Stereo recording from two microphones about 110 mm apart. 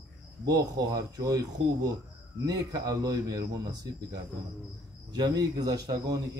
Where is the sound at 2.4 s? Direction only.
35° right (ahead or behind).